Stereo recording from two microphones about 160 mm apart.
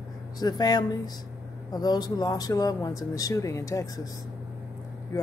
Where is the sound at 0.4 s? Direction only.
25° left (ahead or behind).